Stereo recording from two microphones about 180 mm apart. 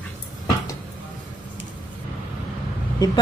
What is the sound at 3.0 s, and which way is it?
Speech, 20° left (ahead or behind).